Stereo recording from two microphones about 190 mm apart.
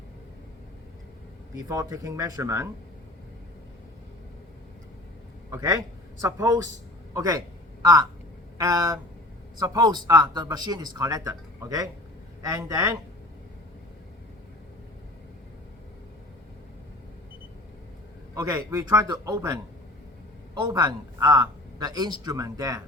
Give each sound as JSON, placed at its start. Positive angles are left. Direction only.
{"t": 1.5, "sound": "a man's voice", "side_deg": -20}
{"t": 5.5, "sound": "a man's voice", "side_deg": -20}
{"t": 7.1, "sound": "a sound", "side_deg": -20}
{"t": 8.5, "sound": "a man's voice", "side_deg": -20}
{"t": 18.3, "sound": "a man's voice", "side_deg": -15}
{"t": 20.6, "sound": "speech", "side_deg": -20}